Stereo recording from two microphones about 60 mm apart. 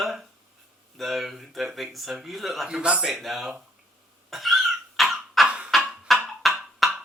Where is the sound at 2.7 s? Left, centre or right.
Centre.